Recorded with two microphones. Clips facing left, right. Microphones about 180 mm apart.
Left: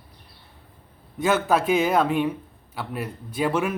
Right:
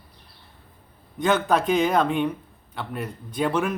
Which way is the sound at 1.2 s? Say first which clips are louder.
Even; 5° left (ahead or behind).